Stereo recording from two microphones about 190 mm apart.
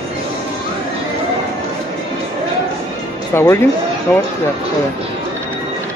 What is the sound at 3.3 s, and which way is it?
Speech, 15° left (ahead or behind).